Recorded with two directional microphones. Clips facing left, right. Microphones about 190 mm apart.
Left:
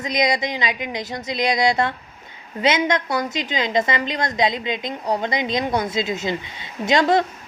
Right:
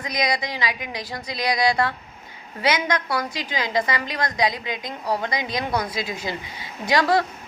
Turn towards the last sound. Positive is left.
turn(degrees=20)  # may be behind; listen again after turning